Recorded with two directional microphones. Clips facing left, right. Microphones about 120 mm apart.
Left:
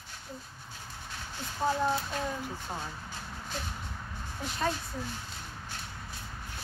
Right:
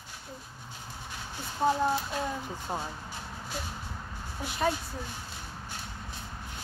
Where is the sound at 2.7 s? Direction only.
25° right (ahead or behind).